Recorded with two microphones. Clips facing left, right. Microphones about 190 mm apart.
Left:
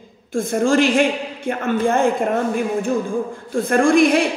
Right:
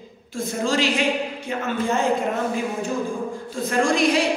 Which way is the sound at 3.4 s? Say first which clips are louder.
Left 6 dB; 55° left (ahead or behind).